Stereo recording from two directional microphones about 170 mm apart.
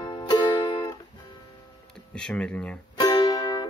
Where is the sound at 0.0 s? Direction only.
25° left (ahead or behind).